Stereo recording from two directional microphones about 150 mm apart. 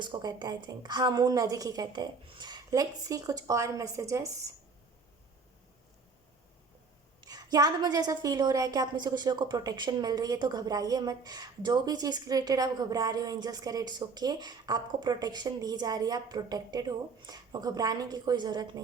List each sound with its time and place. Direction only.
0.0 s a woman's voice: 30° right (ahead or behind)
7.2 s a woman's voice: 25° right (ahead or behind)